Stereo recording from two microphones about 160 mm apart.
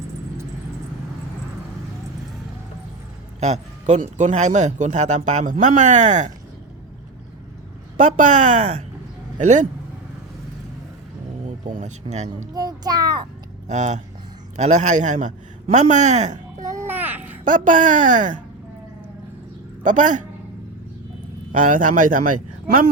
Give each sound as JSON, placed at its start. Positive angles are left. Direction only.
{"t": 3.4, "sound": "speech", "side_deg": -45}
{"t": 7.9, "sound": "speech", "side_deg": -50}
{"t": 11.4, "sound": "speech", "side_deg": -50}
{"t": 12.5, "sound": "a child's voice", "side_deg": -25}
{"t": 13.7, "sound": "a man's voice", "side_deg": -45}
{"t": 16.7, "sound": "babbling", "side_deg": -10}
{"t": 17.4, "sound": "speech", "side_deg": -55}
{"t": 19.8, "sound": "speech", "side_deg": -50}
{"t": 21.5, "sound": "speech", "side_deg": -55}